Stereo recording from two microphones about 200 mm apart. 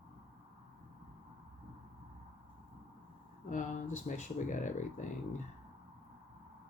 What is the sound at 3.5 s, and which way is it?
Speech, 40° left (ahead or behind).